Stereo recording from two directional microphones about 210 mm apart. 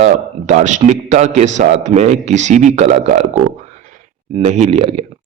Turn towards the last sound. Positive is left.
turn(degrees=-30)  # may be behind; listen again after turning